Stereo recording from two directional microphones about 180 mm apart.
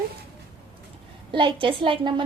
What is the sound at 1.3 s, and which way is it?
Speech, 25° right (ahead or behind).